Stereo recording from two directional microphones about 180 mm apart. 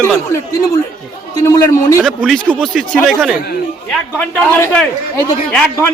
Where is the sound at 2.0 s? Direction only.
Centre (ahead or behind).